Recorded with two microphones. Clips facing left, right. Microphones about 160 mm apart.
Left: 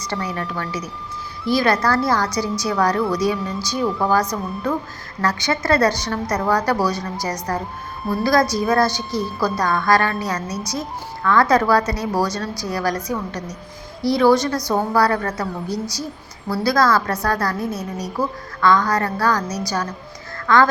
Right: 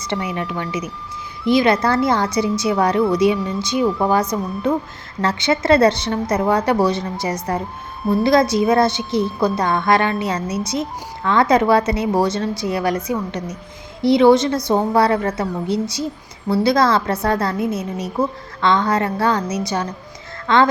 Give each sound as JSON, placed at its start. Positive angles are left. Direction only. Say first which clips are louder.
{"t": 0.0, "sound": "a woman's voice", "louder": "right 2 dB", "side_deg": -20}